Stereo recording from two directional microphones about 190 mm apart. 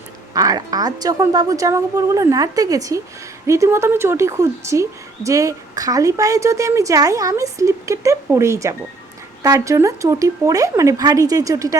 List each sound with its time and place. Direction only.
0.3 s a woman's voice: 20° right (ahead or behind)